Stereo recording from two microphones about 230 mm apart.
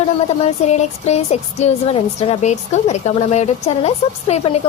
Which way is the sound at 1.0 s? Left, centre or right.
Left.